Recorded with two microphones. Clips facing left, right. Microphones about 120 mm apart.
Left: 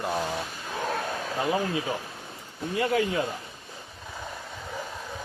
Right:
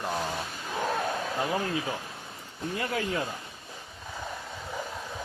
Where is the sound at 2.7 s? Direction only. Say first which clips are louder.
Left 7 dB; 25° left (ahead or behind).